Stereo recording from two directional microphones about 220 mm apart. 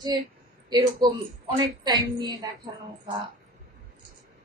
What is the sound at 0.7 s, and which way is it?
A woman's voice, 15° right (ahead or behind).